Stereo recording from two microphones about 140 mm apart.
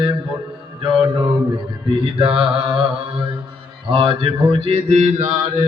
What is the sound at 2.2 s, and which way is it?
Mantra, 40° right (ahead or behind).